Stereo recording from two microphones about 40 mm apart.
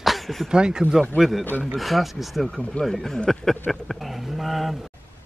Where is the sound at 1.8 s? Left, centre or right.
Centre.